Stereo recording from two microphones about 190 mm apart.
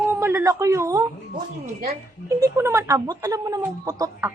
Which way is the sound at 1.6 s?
35° right (ahead or behind).